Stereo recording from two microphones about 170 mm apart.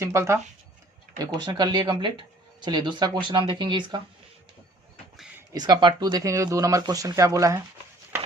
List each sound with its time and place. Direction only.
0.0 s speech: 15° right (ahead or behind)
5.5 s speech: 25° right (ahead or behind)